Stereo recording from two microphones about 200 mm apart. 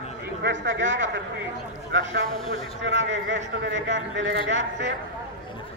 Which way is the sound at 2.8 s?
65° right (ahead or behind).